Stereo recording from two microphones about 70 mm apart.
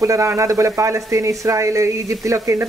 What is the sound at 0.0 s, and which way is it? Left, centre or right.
Speech, right.